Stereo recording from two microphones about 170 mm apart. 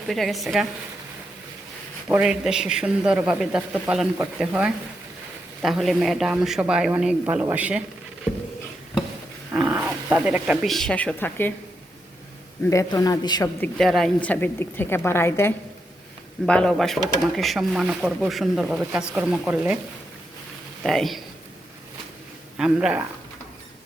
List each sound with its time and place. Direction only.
0.1 s speech: centre (ahead or behind)
2.0 s speech: 5° right (ahead or behind)
9.5 s speech: 10° right (ahead or behind); by 11.5 s 10° left (ahead or behind)
12.7 s a man's voice: 20° left (ahead or behind)
13.6 s a woman's voice: centre (ahead or behind)
20.8 s speech: centre (ahead or behind)
22.5 s speech: 5° right (ahead or behind)